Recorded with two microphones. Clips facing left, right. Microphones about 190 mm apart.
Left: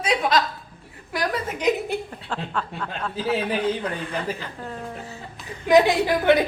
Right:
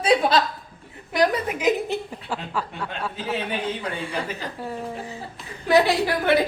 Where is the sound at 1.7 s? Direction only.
Centre (ahead or behind).